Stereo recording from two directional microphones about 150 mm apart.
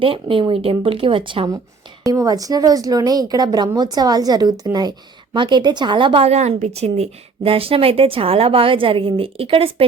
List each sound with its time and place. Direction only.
0.0 s a woman's voice: 35° right (ahead or behind)
2.0 s a woman's voice: 25° right (ahead or behind); by 9.8 s 40° right (ahead or behind)